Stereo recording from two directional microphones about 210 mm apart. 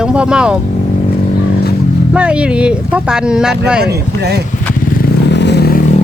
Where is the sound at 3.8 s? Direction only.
50° right (ahead or behind).